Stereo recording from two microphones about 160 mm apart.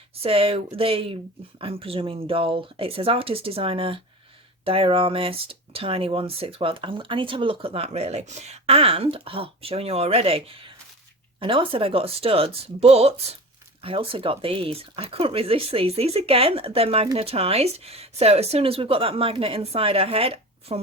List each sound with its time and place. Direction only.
0.1 s speech: 35° right (ahead or behind)